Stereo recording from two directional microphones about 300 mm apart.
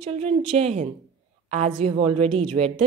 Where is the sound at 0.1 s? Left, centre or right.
Centre.